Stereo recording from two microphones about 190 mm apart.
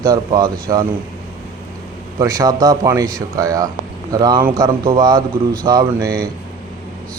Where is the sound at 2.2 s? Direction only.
20° right (ahead or behind).